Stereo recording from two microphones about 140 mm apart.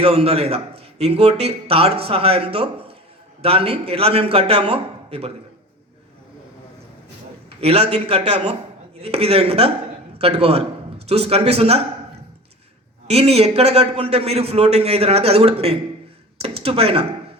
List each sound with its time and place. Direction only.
0.0 s a man's voice: 45° right (ahead or behind)
7.6 s a man's voice: 45° right (ahead or behind)
13.1 s a man's voice: 45° right (ahead or behind)